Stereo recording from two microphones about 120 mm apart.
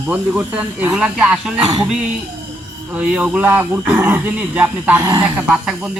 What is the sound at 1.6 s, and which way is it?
Speech, 30° right (ahead or behind).